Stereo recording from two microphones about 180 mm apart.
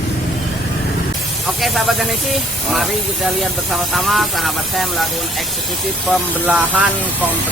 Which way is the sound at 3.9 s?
Centre (ahead or behind).